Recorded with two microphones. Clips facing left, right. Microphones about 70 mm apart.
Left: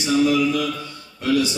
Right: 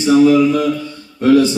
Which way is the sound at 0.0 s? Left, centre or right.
Right.